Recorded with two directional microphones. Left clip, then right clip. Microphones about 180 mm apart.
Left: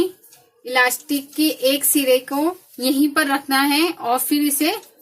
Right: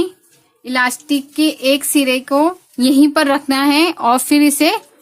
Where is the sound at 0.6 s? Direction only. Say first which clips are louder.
Right 1 dB; 60° right (ahead or behind).